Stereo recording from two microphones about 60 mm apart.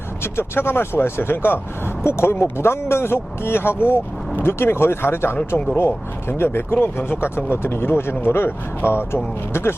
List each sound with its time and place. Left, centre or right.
0.2 s speech: left